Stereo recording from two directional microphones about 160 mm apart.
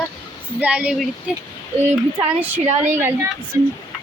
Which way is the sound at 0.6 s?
10° right (ahead or behind).